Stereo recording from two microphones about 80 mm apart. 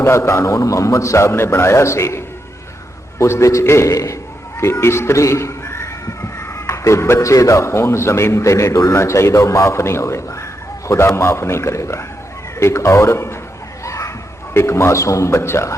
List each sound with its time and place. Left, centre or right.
0.0 s a man's voice: left
13.8 s children playing: left
14.5 s a man's voice: left